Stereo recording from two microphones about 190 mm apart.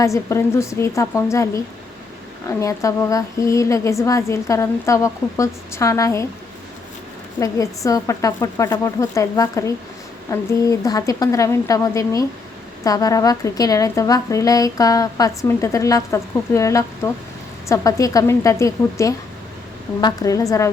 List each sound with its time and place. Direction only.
0.0 s a woman's voice: 15° left (ahead or behind)
7.3 s a woman's voice: 15° left (ahead or behind)